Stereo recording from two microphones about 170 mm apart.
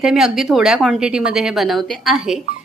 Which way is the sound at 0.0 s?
5° right (ahead or behind).